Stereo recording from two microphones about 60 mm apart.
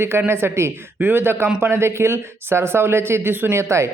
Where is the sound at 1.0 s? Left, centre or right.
Right.